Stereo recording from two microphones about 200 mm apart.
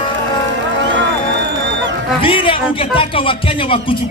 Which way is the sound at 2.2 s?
25° left (ahead or behind).